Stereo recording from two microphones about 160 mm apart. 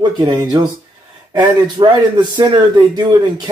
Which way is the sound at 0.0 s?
25° right (ahead or behind).